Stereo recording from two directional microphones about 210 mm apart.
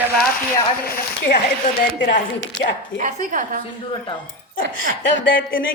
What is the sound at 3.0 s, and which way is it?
Speech, 35° right (ahead or behind).